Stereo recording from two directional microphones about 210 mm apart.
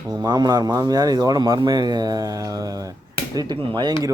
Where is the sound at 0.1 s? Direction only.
20° right (ahead or behind).